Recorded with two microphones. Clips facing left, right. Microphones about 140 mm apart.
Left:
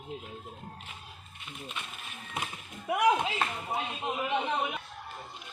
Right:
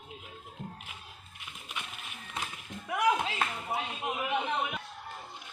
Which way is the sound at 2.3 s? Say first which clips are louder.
Left 1 dB; 20° left (ahead or behind).